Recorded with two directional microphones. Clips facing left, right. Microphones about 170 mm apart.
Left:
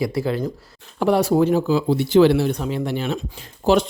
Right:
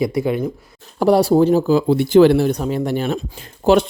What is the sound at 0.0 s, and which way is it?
Speech, 20° right (ahead or behind).